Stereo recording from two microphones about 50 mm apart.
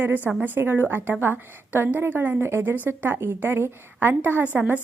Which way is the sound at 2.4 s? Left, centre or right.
Right.